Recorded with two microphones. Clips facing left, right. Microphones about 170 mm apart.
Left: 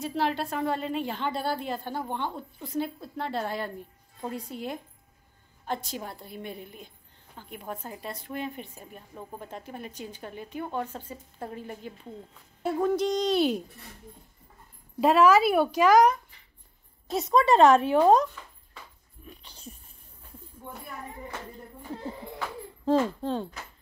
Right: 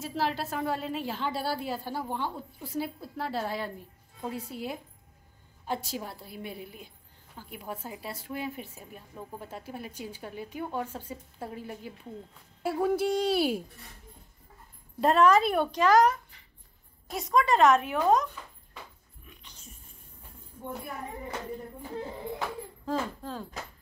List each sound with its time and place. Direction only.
0.0 s a woman's voice: centre (ahead or behind)
15.0 s speech: centre (ahead or behind)
17.1 s a woman's voice: 25° left (ahead or behind)
19.2 s a sound: 30° left (ahead or behind)
22.8 s a woman's voice: 25° left (ahead or behind)